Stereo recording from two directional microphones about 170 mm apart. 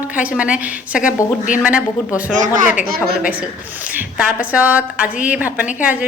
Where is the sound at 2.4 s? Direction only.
50° right (ahead or behind).